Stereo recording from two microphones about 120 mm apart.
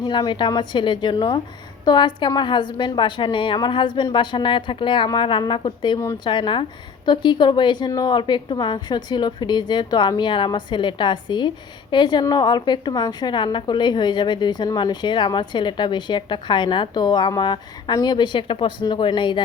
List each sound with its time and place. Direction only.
0.0 s a woman's voice: 40° left (ahead or behind)